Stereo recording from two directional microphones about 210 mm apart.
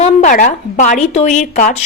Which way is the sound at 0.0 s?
35° left (ahead or behind).